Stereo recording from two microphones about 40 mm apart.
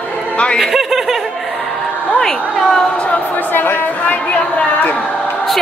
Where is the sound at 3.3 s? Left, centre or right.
Left.